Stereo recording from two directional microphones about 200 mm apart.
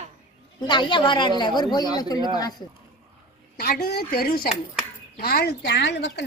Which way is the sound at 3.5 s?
50° left (ahead or behind).